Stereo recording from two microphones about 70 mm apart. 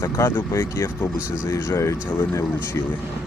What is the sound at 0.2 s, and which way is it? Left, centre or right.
Speech, left.